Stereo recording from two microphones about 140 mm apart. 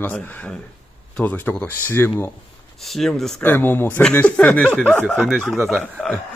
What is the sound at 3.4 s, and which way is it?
Speech, 15° left (ahead or behind).